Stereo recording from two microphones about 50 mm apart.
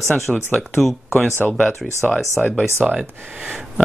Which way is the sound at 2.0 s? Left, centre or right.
Centre.